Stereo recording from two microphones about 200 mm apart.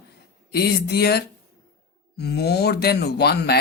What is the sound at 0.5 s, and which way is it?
Speech, 55° left (ahead or behind).